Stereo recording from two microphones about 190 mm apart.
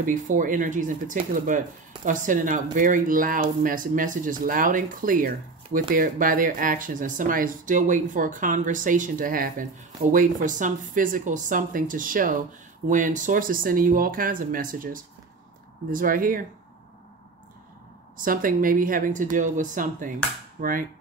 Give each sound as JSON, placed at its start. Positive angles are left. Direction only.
{"t": 0.0, "sound": "speech", "side_deg": -45}
{"t": 18.1, "sound": "speech", "side_deg": -45}